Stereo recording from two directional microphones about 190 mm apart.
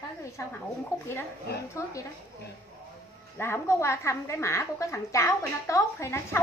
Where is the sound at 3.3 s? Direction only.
15° left (ahead or behind).